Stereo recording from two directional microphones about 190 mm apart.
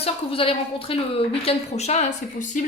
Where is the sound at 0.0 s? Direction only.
30° left (ahead or behind).